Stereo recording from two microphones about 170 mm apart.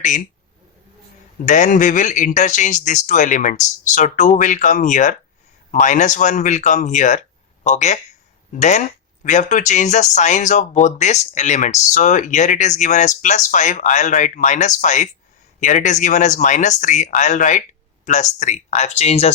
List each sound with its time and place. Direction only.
1.5 s speech: 45° left (ahead or behind)